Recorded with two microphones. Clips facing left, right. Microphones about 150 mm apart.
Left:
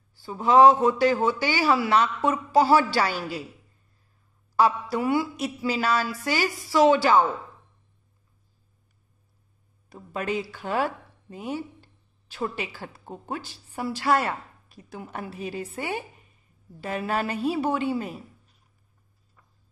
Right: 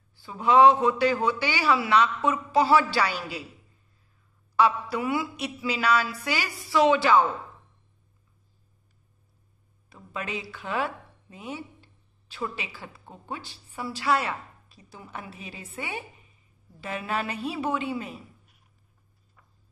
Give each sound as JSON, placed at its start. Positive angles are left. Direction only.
{"t": 0.2, "sound": "speech", "side_deg": 40}
{"t": 4.6, "sound": "speech", "side_deg": 40}
{"t": 9.8, "sound": "a woman's voice", "side_deg": 45}
{"t": 15.6, "sound": "speech", "side_deg": 40}